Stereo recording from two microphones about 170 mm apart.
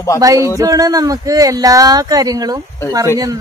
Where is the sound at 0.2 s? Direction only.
20° right (ahead or behind).